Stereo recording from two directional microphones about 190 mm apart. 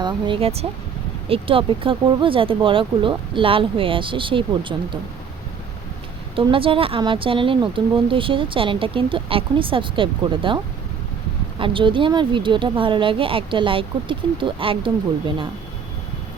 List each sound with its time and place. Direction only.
0.0 s speech: 30° right (ahead or behind)
6.3 s speech: 25° right (ahead or behind)
11.6 s speech: 25° right (ahead or behind)